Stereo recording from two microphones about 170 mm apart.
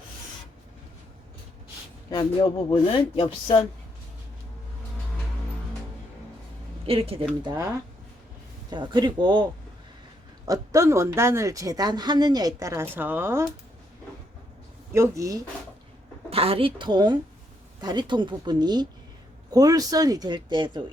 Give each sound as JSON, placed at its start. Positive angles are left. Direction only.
{"t": 2.0, "sound": "speech", "side_deg": 25}
{"t": 6.8, "sound": "speech", "side_deg": -35}
{"t": 7.4, "sound": "speech", "side_deg": -20}
{"t": 8.7, "sound": "speech", "side_deg": -25}
{"t": 14.9, "sound": "speech", "side_deg": -15}
{"t": 16.3, "sound": "speech", "side_deg": -35}